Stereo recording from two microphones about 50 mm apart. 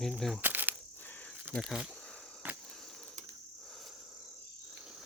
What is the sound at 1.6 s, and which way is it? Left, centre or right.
Speech, centre.